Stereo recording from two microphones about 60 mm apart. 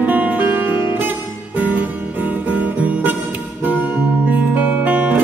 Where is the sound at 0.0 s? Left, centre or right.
Right.